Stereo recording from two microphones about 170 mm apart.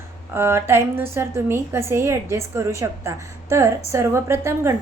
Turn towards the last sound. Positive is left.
turn(degrees=-15)  # may be behind; listen again after turning